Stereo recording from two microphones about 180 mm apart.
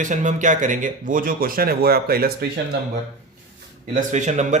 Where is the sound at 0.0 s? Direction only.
45° right (ahead or behind).